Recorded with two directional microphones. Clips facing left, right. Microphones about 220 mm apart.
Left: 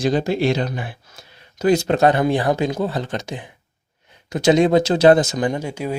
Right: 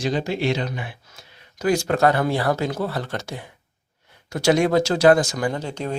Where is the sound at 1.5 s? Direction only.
25° left (ahead or behind).